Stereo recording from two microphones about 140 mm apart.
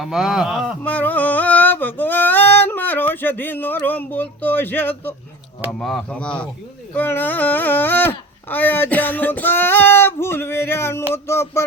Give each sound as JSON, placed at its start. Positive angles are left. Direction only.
{"t": 0.0, "sound": "speech", "side_deg": -5}
{"t": 0.8, "sound": "a sound", "side_deg": 10}
{"t": 5.8, "sound": "speech", "side_deg": 5}